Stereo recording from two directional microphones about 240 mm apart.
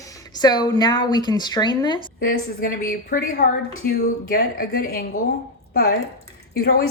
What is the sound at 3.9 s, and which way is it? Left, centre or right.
A woman's voice, left.